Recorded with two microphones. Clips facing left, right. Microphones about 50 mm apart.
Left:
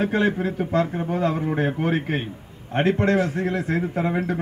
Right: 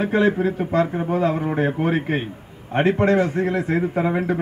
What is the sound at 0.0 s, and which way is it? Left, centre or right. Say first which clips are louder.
A man's voice: right 3 dB; right.